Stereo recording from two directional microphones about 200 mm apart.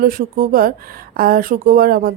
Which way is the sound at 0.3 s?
45° right (ahead or behind).